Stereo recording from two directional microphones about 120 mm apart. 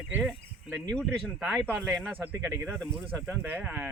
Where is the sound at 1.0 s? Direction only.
Centre (ahead or behind).